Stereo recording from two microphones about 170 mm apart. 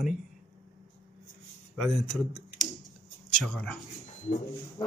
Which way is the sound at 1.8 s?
Centre (ahead or behind).